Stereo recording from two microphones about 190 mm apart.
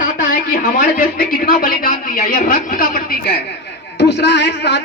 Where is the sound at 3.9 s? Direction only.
65° left (ahead or behind).